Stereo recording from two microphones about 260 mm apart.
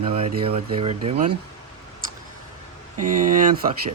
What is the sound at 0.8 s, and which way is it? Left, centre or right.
Speech, right.